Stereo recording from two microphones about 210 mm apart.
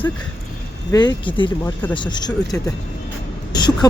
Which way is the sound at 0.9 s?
20° left (ahead or behind).